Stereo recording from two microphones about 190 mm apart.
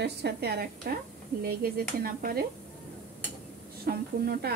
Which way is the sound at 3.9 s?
55° right (ahead or behind).